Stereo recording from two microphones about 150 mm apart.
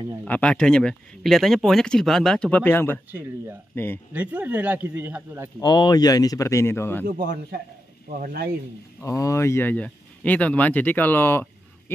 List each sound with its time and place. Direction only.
0.2 s speech: 5° left (ahead or behind)
3.1 s speech: 15° right (ahead or behind)
3.7 s speech: 15° left (ahead or behind)
4.1 s speech: 10° right (ahead or behind)
5.6 s a man's voice: 25° left (ahead or behind)
7.1 s a man's voice: 70° right (ahead or behind)
9.0 s speech: 20° left (ahead or behind)